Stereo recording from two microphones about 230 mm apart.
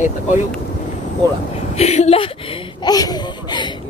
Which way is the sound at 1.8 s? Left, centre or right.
Left.